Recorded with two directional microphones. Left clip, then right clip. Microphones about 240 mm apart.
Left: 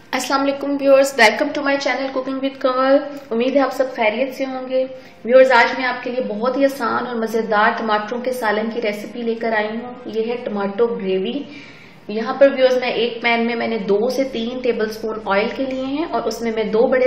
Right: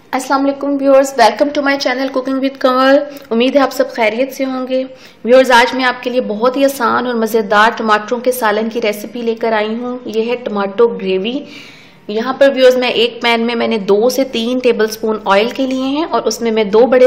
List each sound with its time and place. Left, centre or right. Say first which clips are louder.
0.1 s a woman's voice: right 4 dB; centre
1.5 s a woman's voice: right 5 dB; right